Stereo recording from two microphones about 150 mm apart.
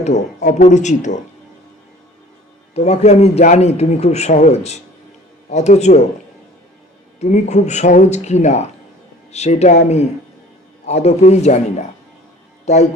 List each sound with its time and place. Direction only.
0.0 s a man's voice: 50° left (ahead or behind)
2.7 s a man's voice: 45° left (ahead or behind)
7.2 s a man's voice: 50° left (ahead or behind)